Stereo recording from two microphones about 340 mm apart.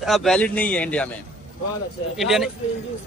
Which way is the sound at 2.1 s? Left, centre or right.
Centre.